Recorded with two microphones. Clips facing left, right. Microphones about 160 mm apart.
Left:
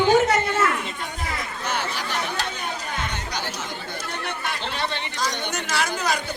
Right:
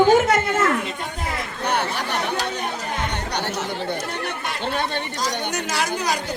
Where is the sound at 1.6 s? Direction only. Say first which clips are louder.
Right 6 dB; 65° right (ahead or behind).